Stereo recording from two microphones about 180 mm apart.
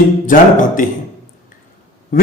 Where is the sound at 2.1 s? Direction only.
50° left (ahead or behind).